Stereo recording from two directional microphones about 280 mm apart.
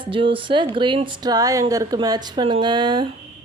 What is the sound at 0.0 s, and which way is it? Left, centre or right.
Speech, centre.